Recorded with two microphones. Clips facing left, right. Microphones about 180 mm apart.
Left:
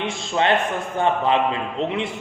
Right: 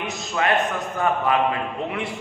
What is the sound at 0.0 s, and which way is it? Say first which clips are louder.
A man's voice: left 3 dB; 25° left (ahead or behind).